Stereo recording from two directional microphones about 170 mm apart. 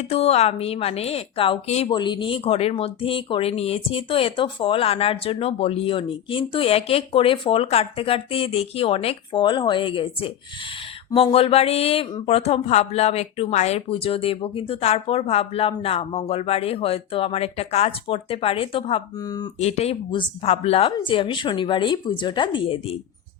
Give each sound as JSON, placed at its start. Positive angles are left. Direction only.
{"t": 0.0, "sound": "speech", "side_deg": 35}
{"t": 1.9, "sound": "speech", "side_deg": 25}
{"t": 19.5, "sound": "speech", "side_deg": 40}